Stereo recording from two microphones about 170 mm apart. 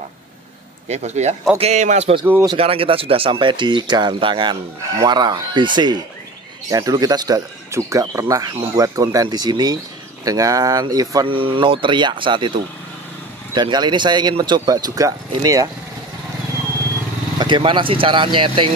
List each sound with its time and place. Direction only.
0.8 s a man's voice: 40° right (ahead or behind)
2.2 s speech: 15° right (ahead or behind)
2.5 s speech: 35° right (ahead or behind)
13.6 s speech: 25° right (ahead or behind)
17.4 s speech: 30° right (ahead or behind)